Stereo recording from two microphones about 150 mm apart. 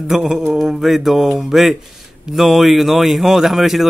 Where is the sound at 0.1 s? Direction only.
5° right (ahead or behind).